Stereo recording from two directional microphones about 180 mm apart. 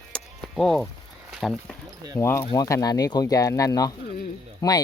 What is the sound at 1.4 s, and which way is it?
Speech, centre (ahead or behind).